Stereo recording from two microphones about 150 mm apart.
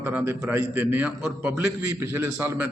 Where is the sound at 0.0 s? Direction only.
15° right (ahead or behind).